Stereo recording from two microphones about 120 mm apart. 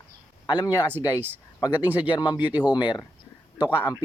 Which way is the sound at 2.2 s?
35° left (ahead or behind).